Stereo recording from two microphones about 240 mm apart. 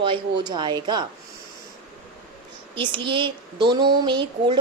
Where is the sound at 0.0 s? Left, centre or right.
Centre.